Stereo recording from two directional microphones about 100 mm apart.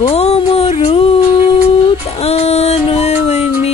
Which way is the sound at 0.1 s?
90° left.